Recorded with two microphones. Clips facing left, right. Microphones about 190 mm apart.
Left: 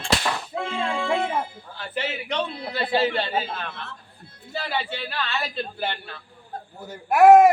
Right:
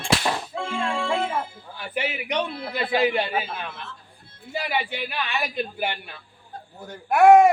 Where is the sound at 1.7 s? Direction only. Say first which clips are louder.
Right 1 dB; 10° right (ahead or behind).